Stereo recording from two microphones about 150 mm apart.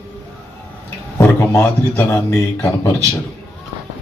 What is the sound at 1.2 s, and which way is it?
A man's voice, 15° left (ahead or behind).